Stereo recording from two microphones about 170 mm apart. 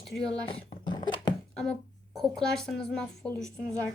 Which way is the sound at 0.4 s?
30° left (ahead or behind).